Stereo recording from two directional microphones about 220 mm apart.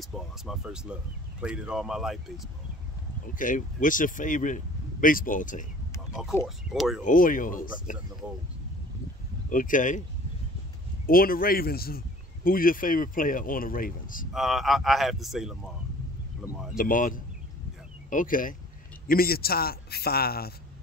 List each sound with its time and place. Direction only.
0.0 s speech: centre (ahead or behind)
3.3 s speech: 35° left (ahead or behind)
6.4 s speech: centre (ahead or behind)
7.1 s speech: 40° left (ahead or behind)
9.5 s speech: 40° left (ahead or behind)
11.1 s speech: 40° left (ahead or behind)
14.3 s speech: centre (ahead or behind)
16.7 s a man's voice: 40° left (ahead or behind)